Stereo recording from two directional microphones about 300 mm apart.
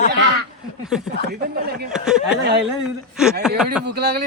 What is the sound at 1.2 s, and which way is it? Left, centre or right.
Speech, right.